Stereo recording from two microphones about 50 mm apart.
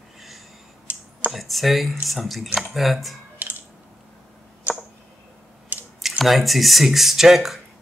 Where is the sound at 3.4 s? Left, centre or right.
Right.